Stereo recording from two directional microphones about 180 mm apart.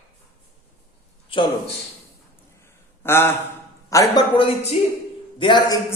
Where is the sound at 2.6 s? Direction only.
15° left (ahead or behind).